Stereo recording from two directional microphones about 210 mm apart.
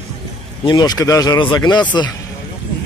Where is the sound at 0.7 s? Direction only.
20° left (ahead or behind).